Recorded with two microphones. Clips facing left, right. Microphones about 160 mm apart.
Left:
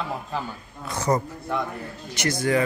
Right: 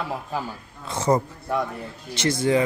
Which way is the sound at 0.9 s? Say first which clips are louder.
Right 2 dB; 25° right (ahead or behind).